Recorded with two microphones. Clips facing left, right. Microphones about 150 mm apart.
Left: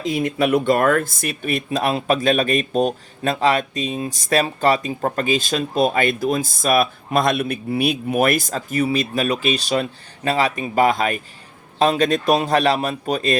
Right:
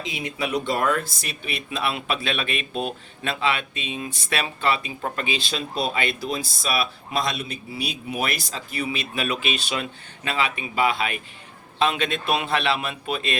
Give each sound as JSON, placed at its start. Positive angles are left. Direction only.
{"t": 0.0, "sound": "a man's voice", "side_deg": 50}